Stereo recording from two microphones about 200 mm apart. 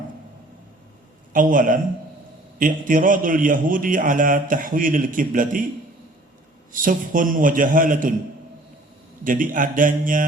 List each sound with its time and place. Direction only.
1.3 s a man's voice: 40° right (ahead or behind)
6.8 s a man's voice: 40° right (ahead or behind)
9.2 s a man's voice: 40° right (ahead or behind)